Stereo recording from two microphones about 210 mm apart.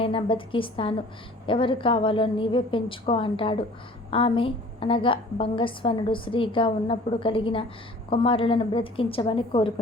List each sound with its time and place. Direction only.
0.0 s a woman's voice: 25° left (ahead or behind)